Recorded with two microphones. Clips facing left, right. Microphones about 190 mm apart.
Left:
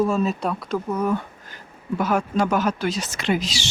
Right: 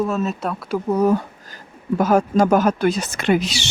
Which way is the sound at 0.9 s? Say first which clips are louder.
Right 8 dB; 40° right (ahead or behind).